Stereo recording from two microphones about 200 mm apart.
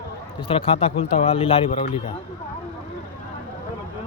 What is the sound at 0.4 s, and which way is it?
A man's voice, 30° left (ahead or behind).